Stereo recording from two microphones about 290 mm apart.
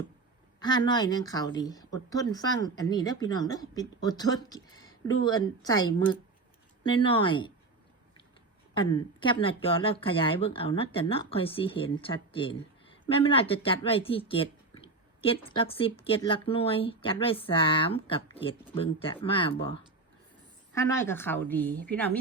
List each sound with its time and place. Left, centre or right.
0.6 s speech: centre
8.7 s a woman's voice: centre